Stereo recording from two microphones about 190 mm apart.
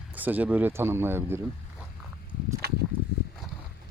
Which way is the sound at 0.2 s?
10° right (ahead or behind).